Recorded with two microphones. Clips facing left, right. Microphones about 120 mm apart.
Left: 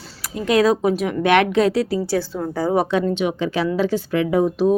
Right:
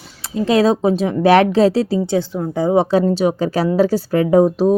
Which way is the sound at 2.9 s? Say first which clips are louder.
Right 5 dB; 35° right (ahead or behind).